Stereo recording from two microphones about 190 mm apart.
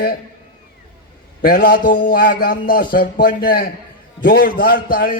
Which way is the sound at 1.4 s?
50° left (ahead or behind).